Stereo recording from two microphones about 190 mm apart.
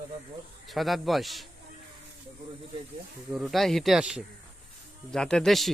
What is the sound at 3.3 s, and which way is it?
Speech, centre (ahead or behind).